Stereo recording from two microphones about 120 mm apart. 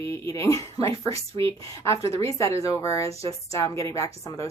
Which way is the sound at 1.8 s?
25° left (ahead or behind).